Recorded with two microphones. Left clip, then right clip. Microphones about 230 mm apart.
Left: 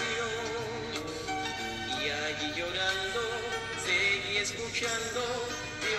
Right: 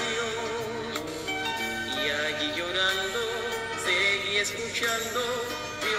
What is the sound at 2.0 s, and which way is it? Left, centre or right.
Music, right.